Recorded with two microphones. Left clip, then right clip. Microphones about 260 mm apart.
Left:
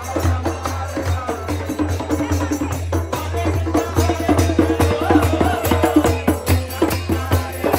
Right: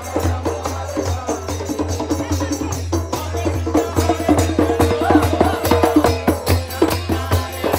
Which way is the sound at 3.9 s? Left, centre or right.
Right.